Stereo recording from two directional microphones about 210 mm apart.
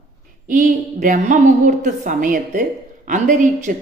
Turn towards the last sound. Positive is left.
turn(degrees=-40)  # may be behind; listen again after turning